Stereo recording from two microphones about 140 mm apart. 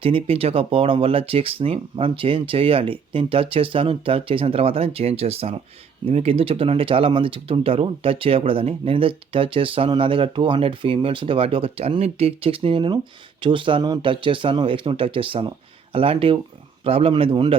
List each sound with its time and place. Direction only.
0.0 s speech: 40° right (ahead or behind)